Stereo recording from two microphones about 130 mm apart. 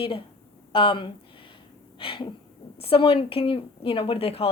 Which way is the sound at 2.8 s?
45° left (ahead or behind).